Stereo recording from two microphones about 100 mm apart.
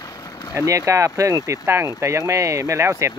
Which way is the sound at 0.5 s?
30° right (ahead or behind).